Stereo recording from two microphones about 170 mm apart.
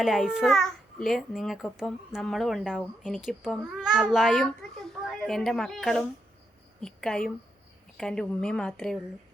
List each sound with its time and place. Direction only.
0.0 s a child's voice: centre (ahead or behind)